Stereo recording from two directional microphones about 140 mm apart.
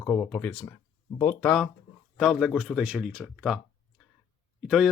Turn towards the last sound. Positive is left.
turn(degrees=0)  # may be behind; listen again after turning